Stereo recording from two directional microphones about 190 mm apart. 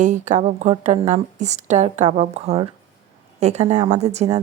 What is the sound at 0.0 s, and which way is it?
Speech, 40° right (ahead or behind).